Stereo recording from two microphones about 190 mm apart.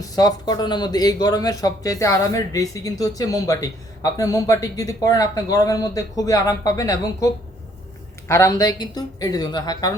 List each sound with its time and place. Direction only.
0.0 s a man's voice: 20° left (ahead or behind)
8.3 s a man's voice: 15° left (ahead or behind)